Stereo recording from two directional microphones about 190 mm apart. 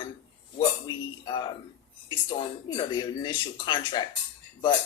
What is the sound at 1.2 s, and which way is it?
Speech, 25° left (ahead or behind).